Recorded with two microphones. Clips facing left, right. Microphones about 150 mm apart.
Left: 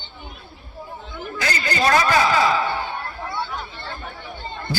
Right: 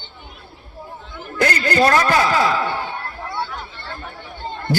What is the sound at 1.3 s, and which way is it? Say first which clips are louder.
A man's voice: right 7 dB; 55° right (ahead or behind).